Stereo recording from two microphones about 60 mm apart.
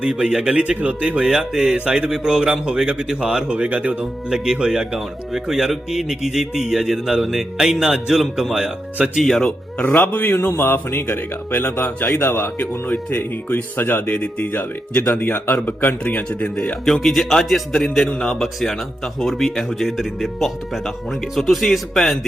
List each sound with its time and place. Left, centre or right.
0.0 s a man's voice: centre
9.8 s speech: left
16.8 s speech: centre